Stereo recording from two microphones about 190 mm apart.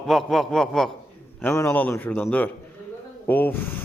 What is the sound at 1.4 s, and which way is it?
A man's voice, 10° left (ahead or behind).